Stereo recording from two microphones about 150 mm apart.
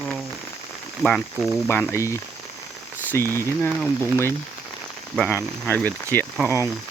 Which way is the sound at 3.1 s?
15° left (ahead or behind).